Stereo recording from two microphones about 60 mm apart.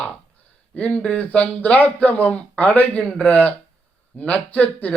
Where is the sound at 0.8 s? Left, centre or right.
Left.